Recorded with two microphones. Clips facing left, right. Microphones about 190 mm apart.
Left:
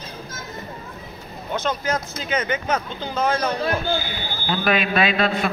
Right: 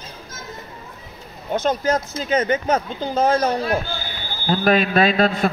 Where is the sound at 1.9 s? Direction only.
40° right (ahead or behind).